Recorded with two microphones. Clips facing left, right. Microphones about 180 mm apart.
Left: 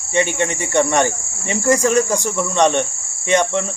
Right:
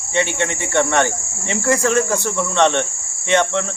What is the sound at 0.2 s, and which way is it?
Cricket, 15° left (ahead or behind).